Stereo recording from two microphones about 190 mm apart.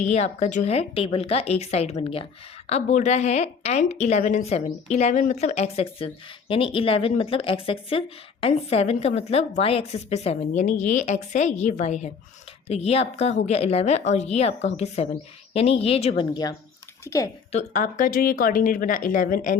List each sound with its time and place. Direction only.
0.0 s speech: 35° left (ahead or behind); by 17.2 s 15° left (ahead or behind)
17.5 s a woman's voice: 40° left (ahead or behind)